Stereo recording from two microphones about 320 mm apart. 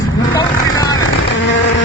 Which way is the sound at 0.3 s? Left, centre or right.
Centre.